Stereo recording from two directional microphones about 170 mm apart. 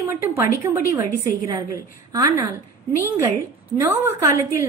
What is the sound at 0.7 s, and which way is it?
A woman's voice, 15° right (ahead or behind).